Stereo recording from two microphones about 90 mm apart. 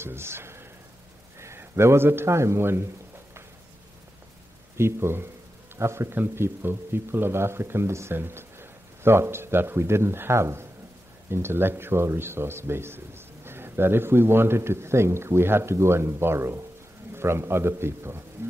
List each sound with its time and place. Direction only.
0.0 s a man's voice: 30° right (ahead or behind)
4.7 s speech: 30° right (ahead or behind)